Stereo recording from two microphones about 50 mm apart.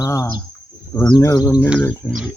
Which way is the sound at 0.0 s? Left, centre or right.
Left.